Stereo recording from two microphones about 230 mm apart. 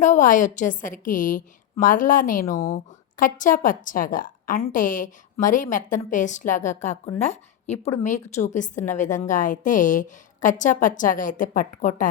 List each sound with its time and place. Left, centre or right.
0.0 s a woman's voice: left